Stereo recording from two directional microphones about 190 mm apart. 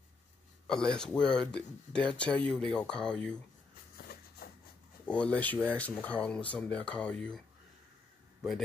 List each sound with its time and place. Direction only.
0.7 s speech: 5° left (ahead or behind)
4.4 s a sound: 50° left (ahead or behind)
5.0 s speech: 5° left (ahead or behind)